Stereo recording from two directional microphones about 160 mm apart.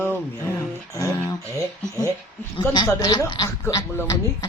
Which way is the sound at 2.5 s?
25° left (ahead or behind).